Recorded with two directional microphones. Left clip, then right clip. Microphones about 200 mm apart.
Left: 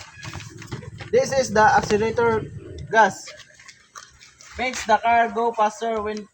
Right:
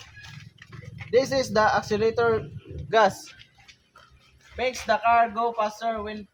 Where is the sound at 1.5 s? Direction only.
25° right (ahead or behind).